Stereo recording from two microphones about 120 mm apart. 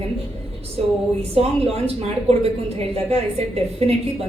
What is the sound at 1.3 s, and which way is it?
A woman's voice, 55° right (ahead or behind).